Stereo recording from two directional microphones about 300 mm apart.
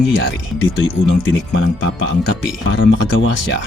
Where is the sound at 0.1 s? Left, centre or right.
Left.